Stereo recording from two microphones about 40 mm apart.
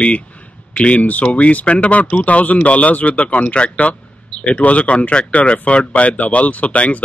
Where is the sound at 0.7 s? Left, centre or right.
Left.